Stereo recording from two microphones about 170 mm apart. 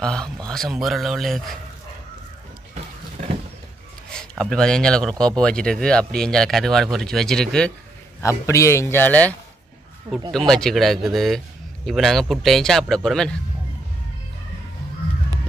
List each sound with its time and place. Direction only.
0.0 s speech: 5° left (ahead or behind)
4.1 s speech: 5° left (ahead or behind)
8.2 s a man's voice: 15° left (ahead or behind)
10.3 s speech: 5° left (ahead or behind)